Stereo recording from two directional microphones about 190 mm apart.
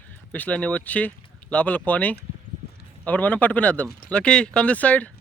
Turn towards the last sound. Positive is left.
turn(degrees=5)  # may be behind; listen again after turning